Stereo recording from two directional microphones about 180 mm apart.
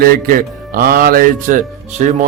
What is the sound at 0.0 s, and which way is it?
Speech, 50° right (ahead or behind).